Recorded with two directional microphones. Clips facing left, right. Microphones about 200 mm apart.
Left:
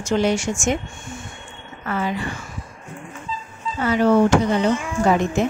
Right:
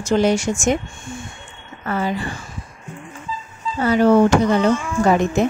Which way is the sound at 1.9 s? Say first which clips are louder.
Right 2 dB; 35° right (ahead or behind).